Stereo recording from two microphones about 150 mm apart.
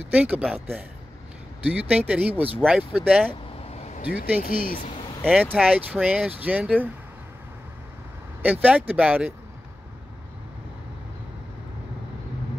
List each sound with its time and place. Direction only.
0.0 s speech: 10° right (ahead or behind)
4.2 s speech: 70° left (ahead or behind)
5.4 s speech: 10° right (ahead or behind)
8.4 s speech: 10° right (ahead or behind)